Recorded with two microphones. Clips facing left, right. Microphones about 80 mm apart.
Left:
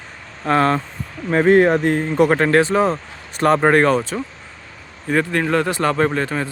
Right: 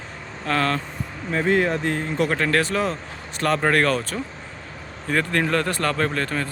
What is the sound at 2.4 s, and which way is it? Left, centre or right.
Speech, left.